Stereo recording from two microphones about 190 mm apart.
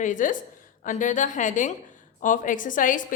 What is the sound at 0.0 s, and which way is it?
A woman's voice, 40° left (ahead or behind).